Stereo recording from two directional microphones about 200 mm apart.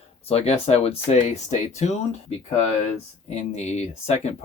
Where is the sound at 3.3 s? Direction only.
35° left (ahead or behind).